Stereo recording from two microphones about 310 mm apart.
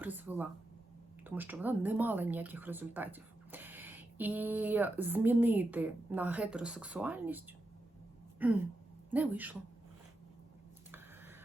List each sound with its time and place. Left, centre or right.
0.0 s speech: centre